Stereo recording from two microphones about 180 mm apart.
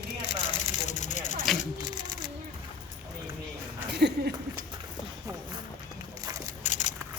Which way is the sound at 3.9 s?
65° right (ahead or behind).